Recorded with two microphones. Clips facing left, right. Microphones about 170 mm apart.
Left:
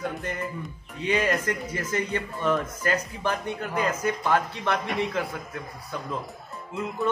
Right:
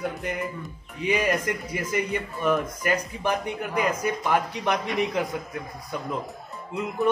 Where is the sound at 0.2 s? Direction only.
15° right (ahead or behind).